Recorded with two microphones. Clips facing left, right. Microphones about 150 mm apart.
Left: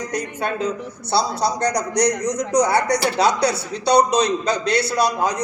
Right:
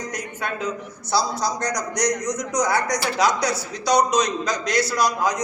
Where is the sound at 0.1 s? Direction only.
30° left (ahead or behind).